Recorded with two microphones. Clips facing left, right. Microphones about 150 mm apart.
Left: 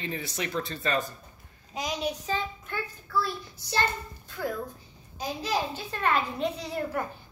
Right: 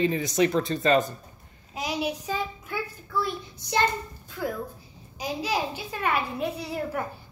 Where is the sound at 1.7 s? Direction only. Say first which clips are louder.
Right 2 dB; 5° right (ahead or behind).